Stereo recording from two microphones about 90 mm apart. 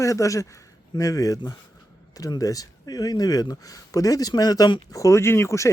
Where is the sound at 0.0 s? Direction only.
35° left (ahead or behind).